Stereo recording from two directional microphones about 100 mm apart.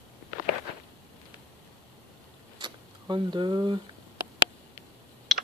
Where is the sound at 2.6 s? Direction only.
50° right (ahead or behind).